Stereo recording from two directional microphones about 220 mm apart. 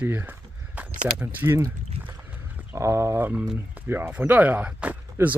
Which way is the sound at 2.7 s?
10° right (ahead or behind).